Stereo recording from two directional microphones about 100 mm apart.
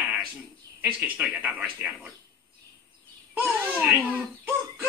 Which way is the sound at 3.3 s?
15° right (ahead or behind).